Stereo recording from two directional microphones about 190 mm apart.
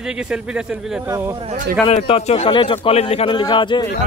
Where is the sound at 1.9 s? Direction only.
30° left (ahead or behind).